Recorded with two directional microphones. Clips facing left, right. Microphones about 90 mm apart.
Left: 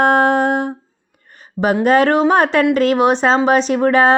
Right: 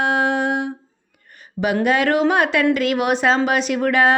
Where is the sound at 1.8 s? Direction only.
40° left (ahead or behind).